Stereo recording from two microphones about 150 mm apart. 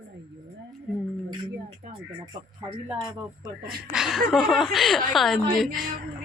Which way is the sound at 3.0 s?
30° right (ahead or behind).